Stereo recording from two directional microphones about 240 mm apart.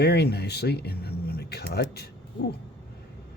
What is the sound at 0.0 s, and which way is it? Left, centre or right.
Speech, left.